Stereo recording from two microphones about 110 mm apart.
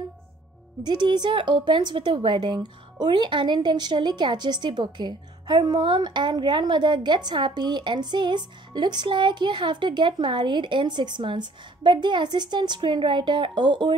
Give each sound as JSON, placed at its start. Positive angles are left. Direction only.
{"t": 0.8, "sound": "a woman's voice", "side_deg": -45}